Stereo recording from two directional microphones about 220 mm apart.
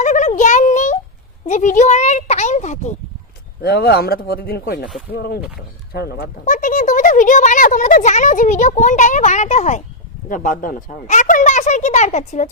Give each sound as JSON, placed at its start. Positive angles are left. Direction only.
{"t": 0.0, "sound": "a sound", "side_deg": 35}
{"t": 1.5, "sound": "speech", "side_deg": 35}
{"t": 3.6, "sound": "speech", "side_deg": 45}